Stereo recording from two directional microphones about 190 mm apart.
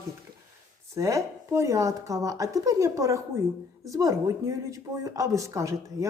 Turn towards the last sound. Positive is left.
turn(degrees=-15)  # may be behind; listen again after turning